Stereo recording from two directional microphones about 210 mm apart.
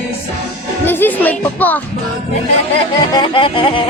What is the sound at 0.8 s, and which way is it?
Speech, 10° left (ahead or behind).